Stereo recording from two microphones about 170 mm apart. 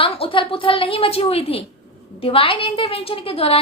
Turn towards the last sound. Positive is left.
turn(degrees=35)  # may be behind; listen again after turning